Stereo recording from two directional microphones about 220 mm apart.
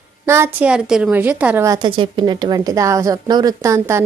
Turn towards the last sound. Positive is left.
turn(degrees=-10)  # may be behind; listen again after turning